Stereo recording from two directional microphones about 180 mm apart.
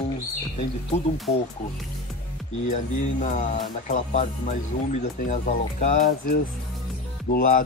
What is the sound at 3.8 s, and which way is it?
Speech, 40° left (ahead or behind).